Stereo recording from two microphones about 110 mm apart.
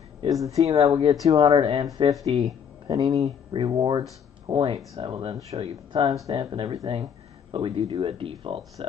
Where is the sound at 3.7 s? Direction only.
45° right (ahead or behind).